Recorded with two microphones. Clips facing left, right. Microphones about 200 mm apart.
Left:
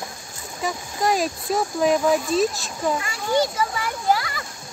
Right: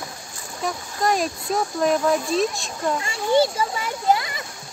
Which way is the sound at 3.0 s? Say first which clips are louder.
Right 3 dB; 30° right (ahead or behind).